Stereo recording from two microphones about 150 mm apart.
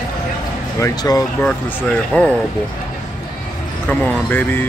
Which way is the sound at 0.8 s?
25° left (ahead or behind).